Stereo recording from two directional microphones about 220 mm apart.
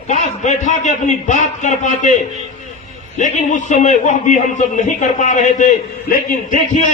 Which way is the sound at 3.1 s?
35° left (ahead or behind).